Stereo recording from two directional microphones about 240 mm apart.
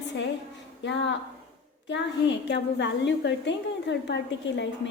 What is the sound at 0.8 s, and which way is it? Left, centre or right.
A woman's voice, left.